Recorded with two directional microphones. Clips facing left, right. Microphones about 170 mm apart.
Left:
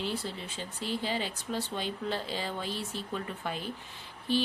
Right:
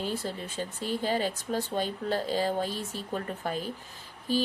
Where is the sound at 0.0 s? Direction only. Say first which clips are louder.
Right 2 dB; 45° right (ahead or behind).